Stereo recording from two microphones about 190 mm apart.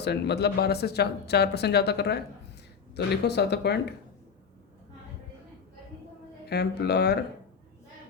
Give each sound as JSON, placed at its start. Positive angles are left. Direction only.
{"t": 0.0, "sound": "speech", "side_deg": 60}
{"t": 6.5, "sound": "speech", "side_deg": 60}